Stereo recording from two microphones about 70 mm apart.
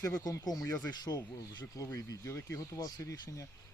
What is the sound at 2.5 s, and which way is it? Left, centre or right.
Speech, left.